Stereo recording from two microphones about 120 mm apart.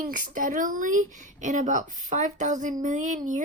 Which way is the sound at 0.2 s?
90° right.